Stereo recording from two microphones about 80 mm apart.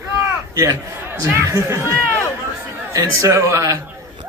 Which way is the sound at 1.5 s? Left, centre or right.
Right.